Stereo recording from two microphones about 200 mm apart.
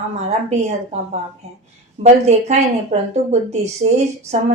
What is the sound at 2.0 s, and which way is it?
Speech, 35° right (ahead or behind).